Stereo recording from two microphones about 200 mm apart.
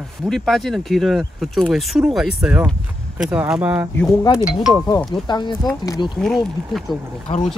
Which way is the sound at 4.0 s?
15° left (ahead or behind).